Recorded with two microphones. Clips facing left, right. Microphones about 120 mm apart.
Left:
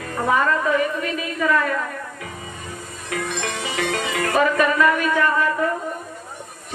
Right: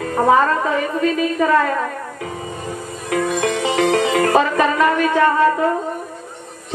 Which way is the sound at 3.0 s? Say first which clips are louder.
Right 8 dB; 40° right (ahead or behind).